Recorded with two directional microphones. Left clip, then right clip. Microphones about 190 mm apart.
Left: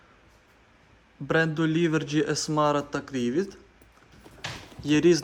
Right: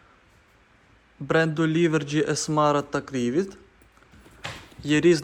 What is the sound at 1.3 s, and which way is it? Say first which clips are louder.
A man's voice: right 2 dB; 10° left (ahead or behind).